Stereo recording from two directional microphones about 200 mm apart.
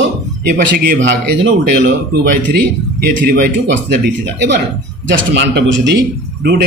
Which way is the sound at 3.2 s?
45° right (ahead or behind).